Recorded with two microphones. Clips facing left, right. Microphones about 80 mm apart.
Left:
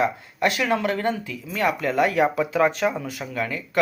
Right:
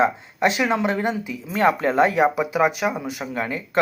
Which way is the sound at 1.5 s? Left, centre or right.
Right.